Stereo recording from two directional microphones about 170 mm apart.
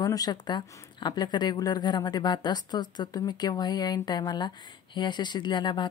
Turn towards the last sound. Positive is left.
turn(degrees=25)  # may be behind; listen again after turning